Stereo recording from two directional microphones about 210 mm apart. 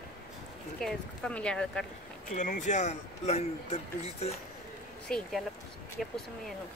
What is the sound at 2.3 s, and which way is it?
Speech, 35° left (ahead or behind).